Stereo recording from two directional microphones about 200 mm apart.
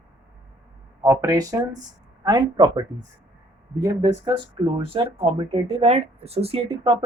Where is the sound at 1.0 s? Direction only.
15° right (ahead or behind).